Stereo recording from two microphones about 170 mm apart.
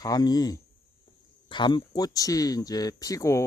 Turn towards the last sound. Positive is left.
turn(degrees=20)  # may be behind; listen again after turning